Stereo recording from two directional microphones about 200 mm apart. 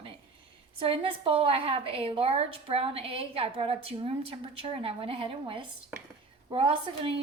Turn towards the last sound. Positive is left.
turn(degrees=-25)  # may be behind; listen again after turning